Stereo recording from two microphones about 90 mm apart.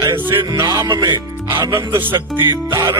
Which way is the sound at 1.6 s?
30° right (ahead or behind).